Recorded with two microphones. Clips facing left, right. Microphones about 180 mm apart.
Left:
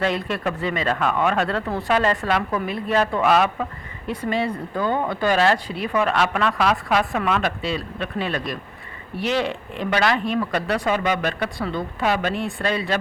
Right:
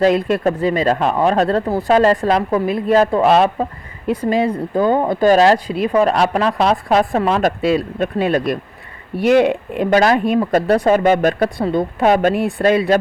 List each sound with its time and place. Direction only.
0.0 s speech: 40° right (ahead or behind)
7.6 s speech: 50° right (ahead or behind)
9.2 s speech: 55° right (ahead or behind)